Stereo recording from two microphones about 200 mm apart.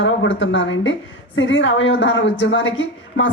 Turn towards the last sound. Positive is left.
turn(degrees=70)  # may be behind; listen again after turning